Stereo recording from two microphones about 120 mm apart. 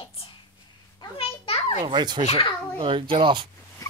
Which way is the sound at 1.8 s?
40° right (ahead or behind).